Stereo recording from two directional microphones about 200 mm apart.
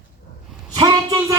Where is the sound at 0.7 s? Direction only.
25° right (ahead or behind).